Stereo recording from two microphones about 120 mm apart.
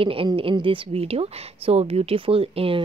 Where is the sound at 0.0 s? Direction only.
50° right (ahead or behind).